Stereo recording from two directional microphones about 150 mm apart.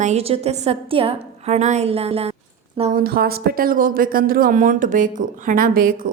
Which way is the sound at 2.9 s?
90° right.